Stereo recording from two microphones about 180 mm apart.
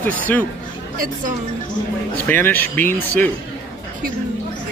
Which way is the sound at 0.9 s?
50° right (ahead or behind).